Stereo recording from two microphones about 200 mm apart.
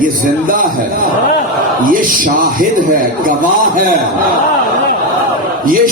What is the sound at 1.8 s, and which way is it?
A man's voice, 45° right (ahead or behind).